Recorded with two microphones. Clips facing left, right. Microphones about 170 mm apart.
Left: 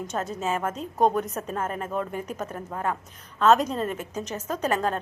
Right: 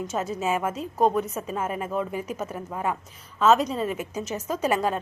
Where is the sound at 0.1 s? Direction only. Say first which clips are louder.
Right 1 dB; 5° right (ahead or behind).